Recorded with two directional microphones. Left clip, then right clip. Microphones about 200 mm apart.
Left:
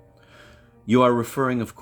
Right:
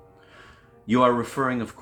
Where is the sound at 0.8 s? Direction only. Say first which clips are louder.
Left 2 dB; 50° left (ahead or behind).